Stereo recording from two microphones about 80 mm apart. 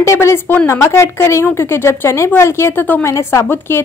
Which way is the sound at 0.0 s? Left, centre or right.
Left.